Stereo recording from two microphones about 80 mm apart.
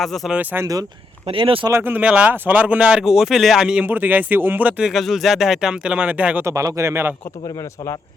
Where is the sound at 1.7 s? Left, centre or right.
Right.